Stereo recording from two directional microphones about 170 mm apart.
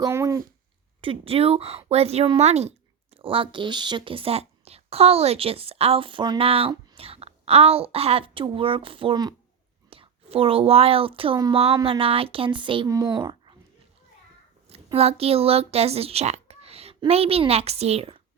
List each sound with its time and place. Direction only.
0.0 s speech: 15° right (ahead or behind)
1.0 s a woman's voice: 30° right (ahead or behind)
14.9 s speech: 35° right (ahead or behind)